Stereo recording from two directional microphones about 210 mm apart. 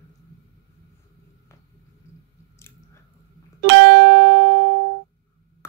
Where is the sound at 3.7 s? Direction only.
55° right (ahead or behind).